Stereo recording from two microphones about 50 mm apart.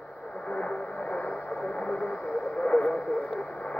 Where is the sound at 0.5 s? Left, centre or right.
Left.